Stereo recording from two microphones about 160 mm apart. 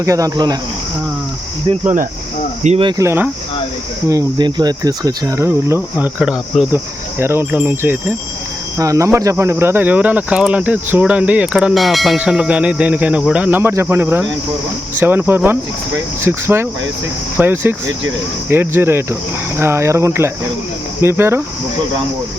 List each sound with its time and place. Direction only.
0.0 s speech: 20° right (ahead or behind)
2.6 s speech: 35° right (ahead or behind)
3.0 s speech: 15° right (ahead or behind)